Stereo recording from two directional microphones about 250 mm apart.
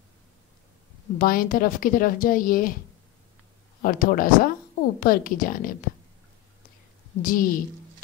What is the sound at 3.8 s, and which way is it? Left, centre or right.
Speech, left.